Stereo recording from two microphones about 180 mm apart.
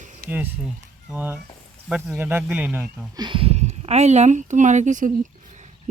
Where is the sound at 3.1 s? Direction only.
25° right (ahead or behind); by 5.7 s 45° right (ahead or behind).